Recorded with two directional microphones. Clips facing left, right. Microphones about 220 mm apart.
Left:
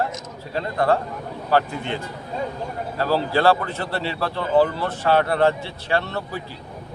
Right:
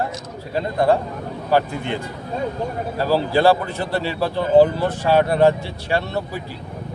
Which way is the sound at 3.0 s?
15° right (ahead or behind).